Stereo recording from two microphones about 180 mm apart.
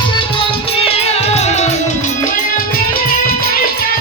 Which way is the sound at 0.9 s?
35° left (ahead or behind).